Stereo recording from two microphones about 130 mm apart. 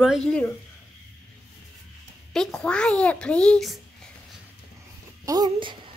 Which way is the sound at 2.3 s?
5° left (ahead or behind).